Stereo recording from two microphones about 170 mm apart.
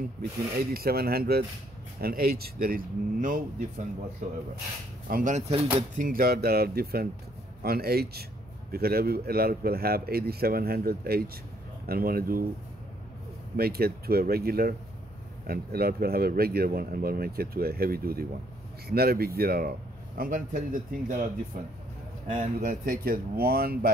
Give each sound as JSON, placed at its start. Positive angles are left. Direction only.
{"t": 0.6, "sound": "speech", "side_deg": -65}
{"t": 5.1, "sound": "speech", "side_deg": -50}
{"t": 5.5, "sound": "speech", "side_deg": -35}
{"t": 5.9, "sound": "speech", "side_deg": -55}
{"t": 13.6, "sound": "speech", "side_deg": -65}